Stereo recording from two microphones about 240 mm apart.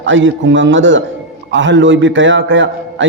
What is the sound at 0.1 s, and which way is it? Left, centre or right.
A man's voice, right.